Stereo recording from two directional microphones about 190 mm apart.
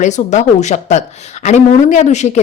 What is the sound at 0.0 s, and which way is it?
Speech, 40° left (ahead or behind).